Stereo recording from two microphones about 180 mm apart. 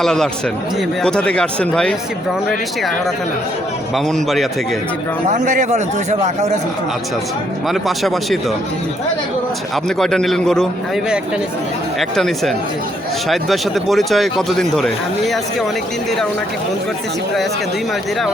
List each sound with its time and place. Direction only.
0.0 s speech: 5° left (ahead or behind)
3.9 s speech: centre (ahead or behind)
5.3 s a man's voice: 45° right (ahead or behind)
7.7 s speech: centre (ahead or behind)
10.0 s speech: 5° left (ahead or behind)
11.9 s speech: centre (ahead or behind)